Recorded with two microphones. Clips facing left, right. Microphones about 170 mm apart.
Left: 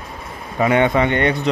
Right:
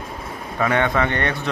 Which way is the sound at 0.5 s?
20° left (ahead or behind).